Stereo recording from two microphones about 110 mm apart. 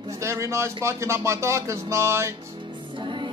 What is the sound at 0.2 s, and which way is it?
Speech, 25° right (ahead or behind).